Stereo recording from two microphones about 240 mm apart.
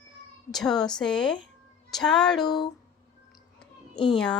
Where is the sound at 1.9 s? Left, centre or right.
Centre.